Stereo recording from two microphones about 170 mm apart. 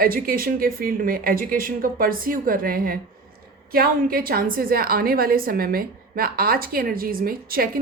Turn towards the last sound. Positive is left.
turn(degrees=-60)  # may be behind; listen again after turning